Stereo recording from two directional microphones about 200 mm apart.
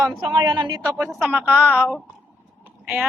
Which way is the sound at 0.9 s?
5° right (ahead or behind).